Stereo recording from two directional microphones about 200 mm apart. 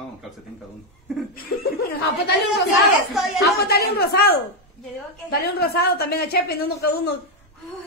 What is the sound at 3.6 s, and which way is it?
A woman's voice, 50° left (ahead or behind).